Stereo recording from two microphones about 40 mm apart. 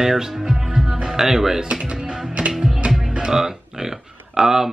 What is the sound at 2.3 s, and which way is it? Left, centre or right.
Music, right.